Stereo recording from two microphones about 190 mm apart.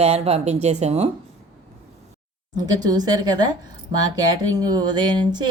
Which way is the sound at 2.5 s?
20° right (ahead or behind).